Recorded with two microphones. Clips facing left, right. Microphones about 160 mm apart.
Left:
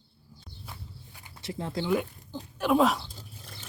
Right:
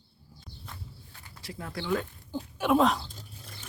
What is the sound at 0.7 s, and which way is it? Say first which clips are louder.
Walk: left 1 dB; 15° left (ahead or behind).